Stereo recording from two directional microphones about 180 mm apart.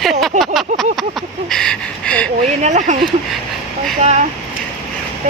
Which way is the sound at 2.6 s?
40° right (ahead or behind).